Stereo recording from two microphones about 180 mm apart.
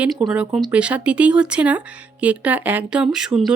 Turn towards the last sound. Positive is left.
turn(degrees=-5)  # may be behind; listen again after turning